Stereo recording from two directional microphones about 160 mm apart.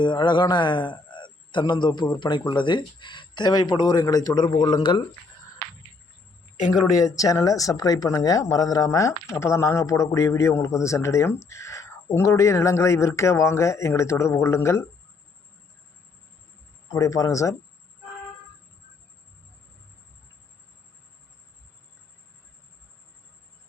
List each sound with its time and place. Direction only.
0.0 s a man's voice: 30° left (ahead or behind)
6.9 s speech: 20° left (ahead or behind)
16.9 s a man's voice: 20° left (ahead or behind)